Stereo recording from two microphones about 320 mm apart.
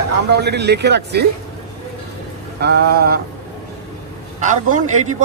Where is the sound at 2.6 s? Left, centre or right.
Right.